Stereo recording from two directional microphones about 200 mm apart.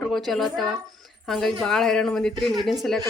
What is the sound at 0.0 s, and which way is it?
A woman's voice, centre (ahead or behind).